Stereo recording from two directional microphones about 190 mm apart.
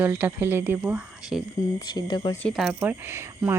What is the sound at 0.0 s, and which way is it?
Speech, 10° right (ahead or behind).